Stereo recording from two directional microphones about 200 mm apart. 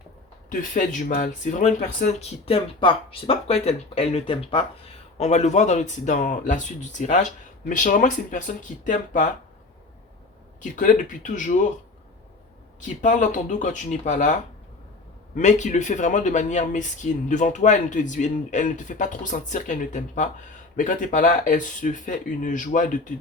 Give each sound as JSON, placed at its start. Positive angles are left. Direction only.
{"t": 0.6, "sound": "speech", "side_deg": 40}
{"t": 10.6, "sound": "speech", "side_deg": 40}
{"t": 12.8, "sound": "speech", "side_deg": 40}
{"t": 15.4, "sound": "speech", "side_deg": 35}